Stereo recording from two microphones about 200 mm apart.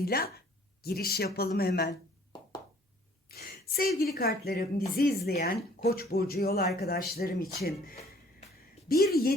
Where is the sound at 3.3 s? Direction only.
50° left (ahead or behind).